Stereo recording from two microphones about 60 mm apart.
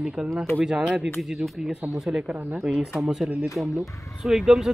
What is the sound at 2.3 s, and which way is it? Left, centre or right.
Speech, right.